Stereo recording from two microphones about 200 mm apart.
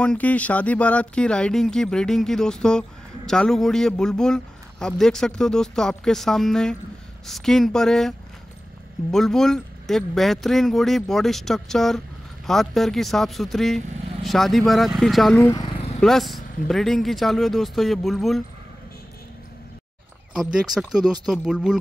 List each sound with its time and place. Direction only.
0.0 s a man's voice: 5° left (ahead or behind)
9.1 s a man's voice: centre (ahead or behind)
15.3 s vehicle: 15° left (ahead or behind)
16.0 s a man's voice: centre (ahead or behind)
20.5 s a man's voice: centre (ahead or behind)